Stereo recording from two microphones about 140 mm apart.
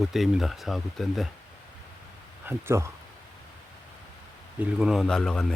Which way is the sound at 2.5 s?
20° right (ahead or behind).